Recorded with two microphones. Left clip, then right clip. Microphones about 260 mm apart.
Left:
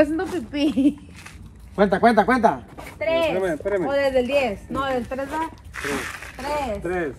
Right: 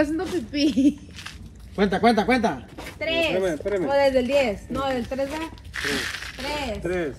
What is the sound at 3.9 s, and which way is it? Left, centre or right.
Speech, left.